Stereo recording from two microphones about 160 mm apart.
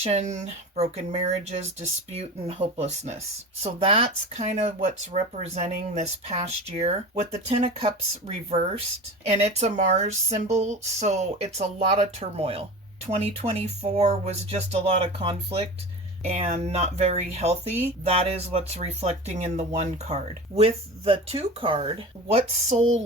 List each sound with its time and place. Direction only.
0.0 s speech: 45° right (ahead or behind)